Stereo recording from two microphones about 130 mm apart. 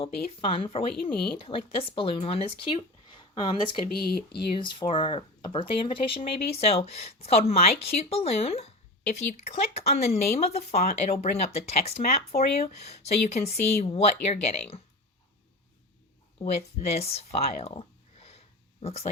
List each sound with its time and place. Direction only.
0.0 s speech: 45° left (ahead or behind)
16.4 s speech: 55° left (ahead or behind)